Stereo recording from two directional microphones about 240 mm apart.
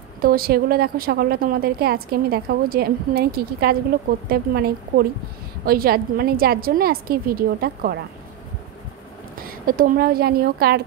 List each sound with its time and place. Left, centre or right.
0.2 s a woman's voice: right
9.3 s speech: right